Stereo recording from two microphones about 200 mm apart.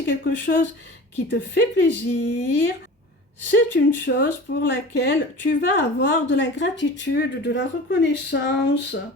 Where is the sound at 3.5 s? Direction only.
60° left (ahead or behind).